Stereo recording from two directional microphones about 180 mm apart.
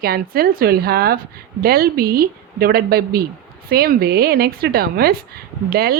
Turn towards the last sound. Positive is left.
turn(degrees=-60)  # may be behind; listen again after turning